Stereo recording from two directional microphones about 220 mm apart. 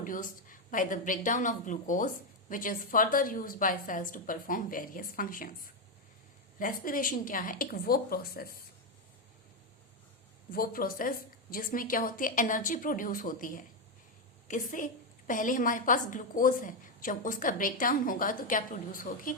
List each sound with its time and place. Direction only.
0.0 s a woman's voice: 40° left (ahead or behind)
6.6 s a woman's voice: 40° left (ahead or behind)
10.5 s a woman's voice: 40° left (ahead or behind)